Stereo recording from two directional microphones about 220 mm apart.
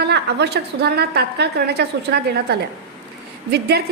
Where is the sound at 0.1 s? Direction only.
50° right (ahead or behind).